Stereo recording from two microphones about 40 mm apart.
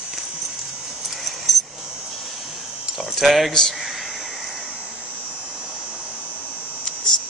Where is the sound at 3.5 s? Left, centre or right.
Centre.